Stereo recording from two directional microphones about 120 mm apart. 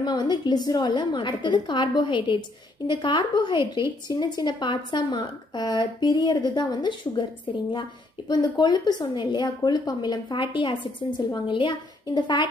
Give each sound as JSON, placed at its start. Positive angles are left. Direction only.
{"t": 0.0, "sound": "a woman's voice", "side_deg": 40}
{"t": 8.3, "sound": "a woman's voice", "side_deg": 35}